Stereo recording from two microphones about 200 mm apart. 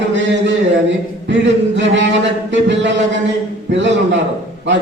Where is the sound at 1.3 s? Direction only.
65° right (ahead or behind).